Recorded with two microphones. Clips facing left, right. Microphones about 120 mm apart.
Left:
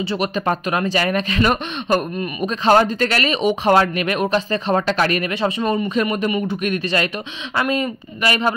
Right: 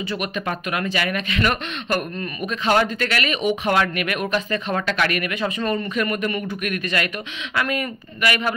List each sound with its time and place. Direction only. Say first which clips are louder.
0.0 s speech: left 5 dB; 30° left (ahead or behind)
5.6 s speech: left 2 dB; 15° left (ahead or behind)
6.5 s speech: left 4 dB; 25° left (ahead or behind)